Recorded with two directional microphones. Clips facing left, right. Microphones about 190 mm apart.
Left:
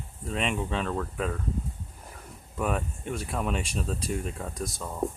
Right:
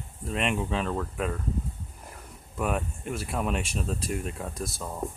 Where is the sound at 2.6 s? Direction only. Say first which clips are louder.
Even; centre (ahead or behind).